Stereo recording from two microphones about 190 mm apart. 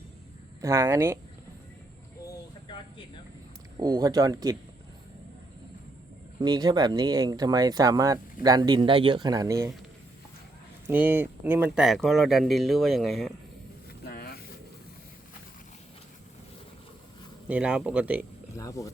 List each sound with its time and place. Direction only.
0.6 s speech: 15° right (ahead or behind)
2.2 s a sound: 25° left (ahead or behind)
3.8 s speech: 20° right (ahead or behind)
6.4 s speech: 20° right (ahead or behind)
10.8 s speech: 10° right (ahead or behind)
14.0 s vehicle: 55° left (ahead or behind)
17.5 s speech: 5° right (ahead or behind)
18.5 s speech: 15° left (ahead or behind)